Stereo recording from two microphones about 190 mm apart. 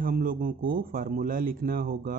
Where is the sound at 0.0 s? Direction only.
50° right (ahead or behind).